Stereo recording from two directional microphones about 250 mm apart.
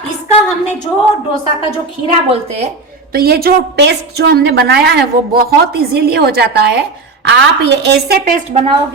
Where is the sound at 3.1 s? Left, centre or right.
Right.